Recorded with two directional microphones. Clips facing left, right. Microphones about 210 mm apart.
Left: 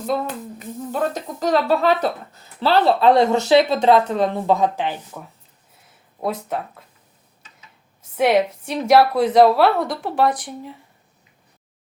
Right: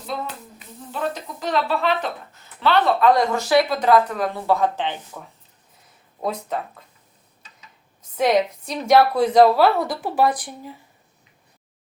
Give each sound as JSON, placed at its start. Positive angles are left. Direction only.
{"t": 0.6, "sound": "speech", "side_deg": 45}
{"t": 8.1, "sound": "a woman's voice", "side_deg": 5}